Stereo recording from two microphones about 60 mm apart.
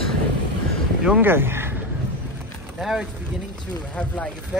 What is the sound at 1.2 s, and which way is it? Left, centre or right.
Speech, right.